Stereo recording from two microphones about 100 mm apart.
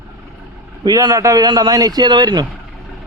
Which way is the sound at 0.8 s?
40° right (ahead or behind).